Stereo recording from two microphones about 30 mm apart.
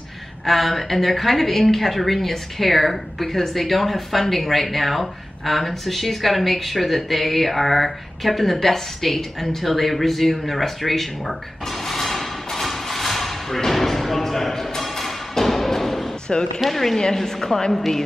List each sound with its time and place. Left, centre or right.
0.5 s a woman's voice: centre
13.7 s music: centre
16.3 s speech: left
16.7 s a woman's voice: centre